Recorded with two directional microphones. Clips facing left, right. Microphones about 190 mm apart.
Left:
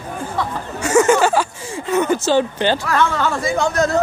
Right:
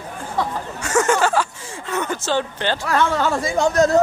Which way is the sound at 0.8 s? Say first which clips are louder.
Left 5 dB; 10° left (ahead or behind).